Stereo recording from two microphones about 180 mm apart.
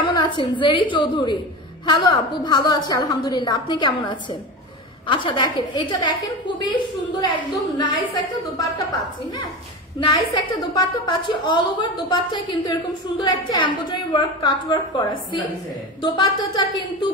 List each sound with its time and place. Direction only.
0.0 s a woman's voice: 25° left (ahead or behind)
9.9 s a woman's voice: 25° left (ahead or behind)